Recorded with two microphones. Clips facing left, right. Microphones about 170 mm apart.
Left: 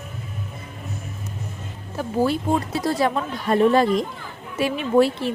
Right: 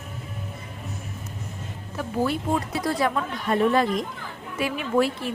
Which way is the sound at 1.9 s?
30° left (ahead or behind).